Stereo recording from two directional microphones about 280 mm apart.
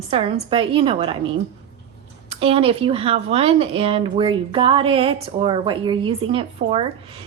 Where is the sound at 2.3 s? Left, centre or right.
Right.